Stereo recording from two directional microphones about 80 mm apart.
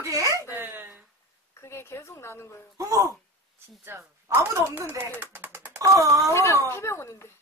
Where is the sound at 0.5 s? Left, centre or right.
Right.